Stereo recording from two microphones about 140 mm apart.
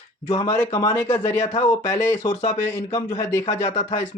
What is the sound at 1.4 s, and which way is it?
Speech, 55° left (ahead or behind).